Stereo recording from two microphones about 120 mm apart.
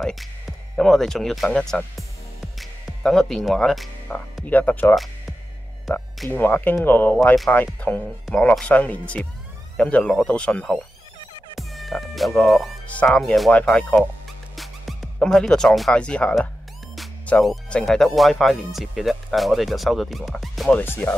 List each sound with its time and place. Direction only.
0.0 s speech: centre (ahead or behind)
4.5 s speech: 15° left (ahead or behind)
6.3 s speech: 15° left (ahead or behind)
11.5 s music: centre (ahead or behind)
12.8 s speech: 10° left (ahead or behind)
20.7 s speech: 15° left (ahead or behind)